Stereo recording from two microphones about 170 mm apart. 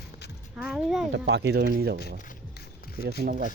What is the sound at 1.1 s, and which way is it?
Speech, 90° right.